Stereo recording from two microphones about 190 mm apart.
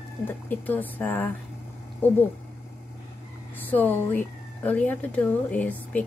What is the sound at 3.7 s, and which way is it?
Speech, 10° left (ahead or behind).